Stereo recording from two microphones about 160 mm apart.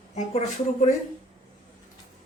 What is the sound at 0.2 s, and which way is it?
Speech, 45° left (ahead or behind).